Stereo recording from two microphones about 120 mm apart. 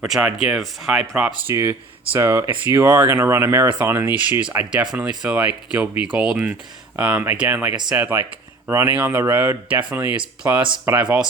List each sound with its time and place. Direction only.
0.0 s speech: 5° right (ahead or behind)
1.5 s speech: 20° right (ahead or behind)
4.4 s speech: 10° right (ahead or behind)